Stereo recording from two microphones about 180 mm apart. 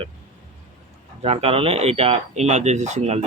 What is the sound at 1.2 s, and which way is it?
Speech, 35° right (ahead or behind).